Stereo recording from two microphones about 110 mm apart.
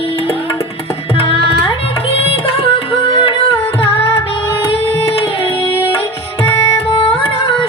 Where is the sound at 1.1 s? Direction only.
60° left (ahead or behind).